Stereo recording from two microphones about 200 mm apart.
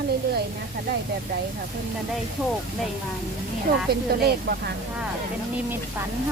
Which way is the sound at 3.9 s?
50° right (ahead or behind).